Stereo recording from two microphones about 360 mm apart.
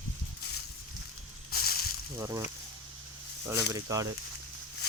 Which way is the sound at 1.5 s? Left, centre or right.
Left.